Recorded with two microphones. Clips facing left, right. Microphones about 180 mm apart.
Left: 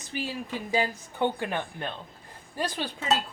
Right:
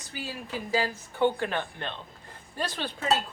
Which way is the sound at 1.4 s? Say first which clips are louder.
Even; 15° left (ahead or behind).